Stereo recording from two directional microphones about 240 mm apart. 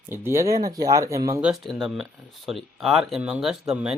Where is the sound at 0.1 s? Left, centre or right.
Centre.